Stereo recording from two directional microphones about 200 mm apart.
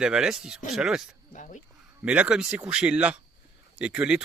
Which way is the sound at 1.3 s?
40° left (ahead or behind).